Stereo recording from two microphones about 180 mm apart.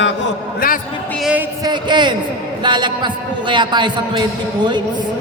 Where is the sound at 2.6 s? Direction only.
25° right (ahead or behind).